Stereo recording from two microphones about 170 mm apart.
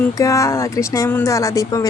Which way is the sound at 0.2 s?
20° left (ahead or behind).